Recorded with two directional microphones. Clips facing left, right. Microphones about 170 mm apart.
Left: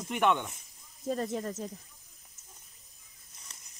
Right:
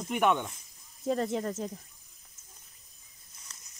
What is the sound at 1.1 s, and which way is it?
Speech, 60° right (ahead or behind).